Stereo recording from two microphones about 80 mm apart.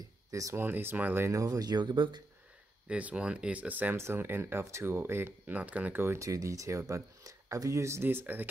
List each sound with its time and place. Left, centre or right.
0.3 s speech: right
0.6 s speech: right
1.3 s speech: right
2.9 s speech: centre
5.6 s speech: centre
6.0 s speech: right